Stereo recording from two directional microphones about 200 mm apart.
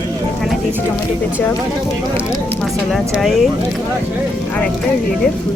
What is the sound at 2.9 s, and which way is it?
Speech, centre (ahead or behind).